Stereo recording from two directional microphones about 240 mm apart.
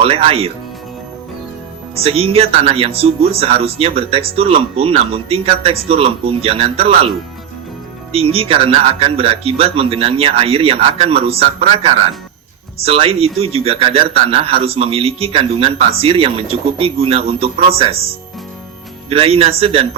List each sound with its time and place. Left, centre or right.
0.0 s speech: right
2.0 s speech: right
8.1 s speech: right
19.1 s speech: right